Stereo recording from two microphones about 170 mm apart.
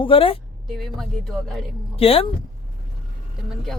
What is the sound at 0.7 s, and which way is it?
Speech, centre (ahead or behind).